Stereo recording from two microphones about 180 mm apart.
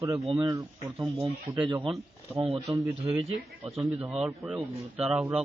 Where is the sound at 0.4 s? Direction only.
20° right (ahead or behind).